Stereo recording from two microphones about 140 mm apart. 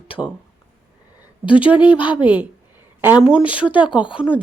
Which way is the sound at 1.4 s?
10° right (ahead or behind).